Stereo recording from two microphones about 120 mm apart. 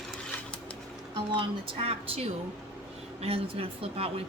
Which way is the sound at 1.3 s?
45° right (ahead or behind).